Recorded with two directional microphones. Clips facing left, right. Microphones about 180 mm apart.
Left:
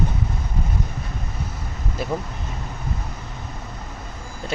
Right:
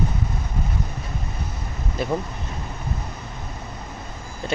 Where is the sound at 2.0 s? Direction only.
5° left (ahead or behind).